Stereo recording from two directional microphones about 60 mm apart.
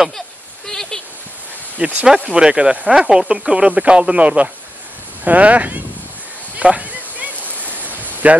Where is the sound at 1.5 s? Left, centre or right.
Right.